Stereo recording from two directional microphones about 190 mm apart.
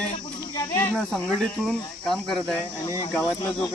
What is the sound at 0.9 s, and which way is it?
Speech, centre (ahead or behind).